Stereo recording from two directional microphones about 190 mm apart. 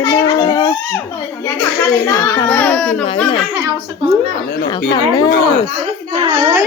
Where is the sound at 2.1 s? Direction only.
15° left (ahead or behind).